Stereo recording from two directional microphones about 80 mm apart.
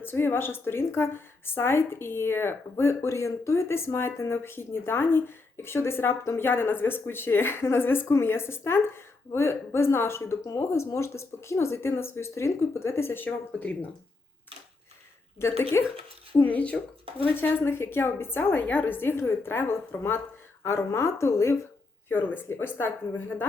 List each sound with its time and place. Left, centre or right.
0.0 s a woman's voice: left
13.5 s speech: centre
15.4 s a woman's voice: left
16.4 s a woman's voice: centre; by 21.5 s left
22.1 s a woman's voice: left